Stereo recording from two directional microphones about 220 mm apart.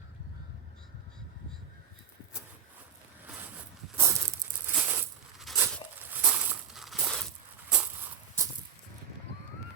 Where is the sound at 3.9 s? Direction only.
10° right (ahead or behind).